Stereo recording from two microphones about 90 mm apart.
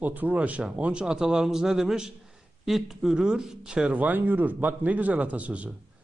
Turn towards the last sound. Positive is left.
turn(degrees=-15)  # may be behind; listen again after turning